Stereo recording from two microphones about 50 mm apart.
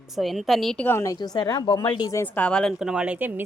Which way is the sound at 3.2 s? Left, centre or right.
Right.